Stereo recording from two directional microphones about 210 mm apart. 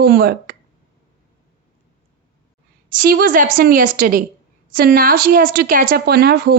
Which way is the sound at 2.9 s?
40° right (ahead or behind).